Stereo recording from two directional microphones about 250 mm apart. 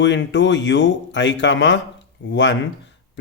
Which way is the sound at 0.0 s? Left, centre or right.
Left.